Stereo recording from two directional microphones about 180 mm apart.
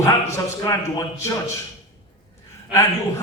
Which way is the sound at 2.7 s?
15° left (ahead or behind).